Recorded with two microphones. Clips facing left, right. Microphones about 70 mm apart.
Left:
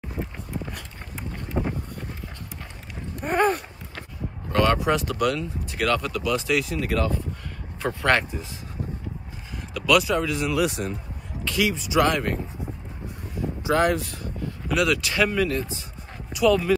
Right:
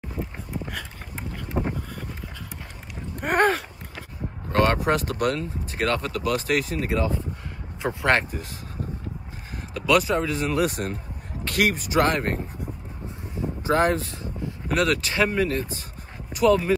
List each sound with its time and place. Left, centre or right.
1.5 s boat: centre
3.2 s a sound: right
4.5 s speech: right
6.9 s a sound: right
8.8 s vehicle: right
9.5 s speech: right
13.0 s a sound: right
13.6 s speech: right
14.7 s speech: right